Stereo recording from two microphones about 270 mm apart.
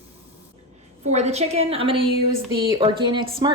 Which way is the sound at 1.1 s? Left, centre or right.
Right.